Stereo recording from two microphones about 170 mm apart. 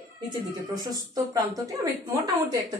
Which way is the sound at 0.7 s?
20° right (ahead or behind).